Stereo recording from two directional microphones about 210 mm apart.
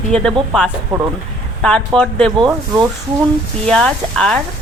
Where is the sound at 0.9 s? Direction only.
25° right (ahead or behind).